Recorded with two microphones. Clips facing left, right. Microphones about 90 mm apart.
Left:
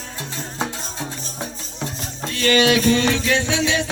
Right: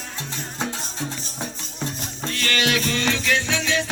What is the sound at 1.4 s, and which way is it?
Music, 15° left (ahead or behind).